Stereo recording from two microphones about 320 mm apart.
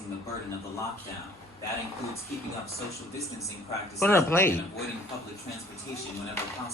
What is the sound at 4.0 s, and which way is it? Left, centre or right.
Speech, centre.